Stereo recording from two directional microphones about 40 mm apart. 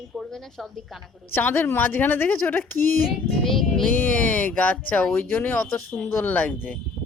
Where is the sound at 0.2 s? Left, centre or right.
Centre.